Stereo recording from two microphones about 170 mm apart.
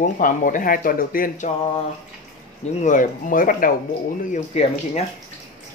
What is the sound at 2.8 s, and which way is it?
Speech, 50° left (ahead or behind).